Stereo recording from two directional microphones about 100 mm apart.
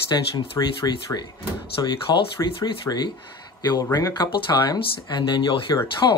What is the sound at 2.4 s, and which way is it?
Speech, 30° left (ahead or behind).